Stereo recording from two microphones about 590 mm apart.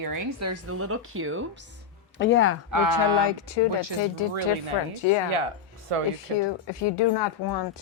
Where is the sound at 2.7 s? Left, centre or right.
Right.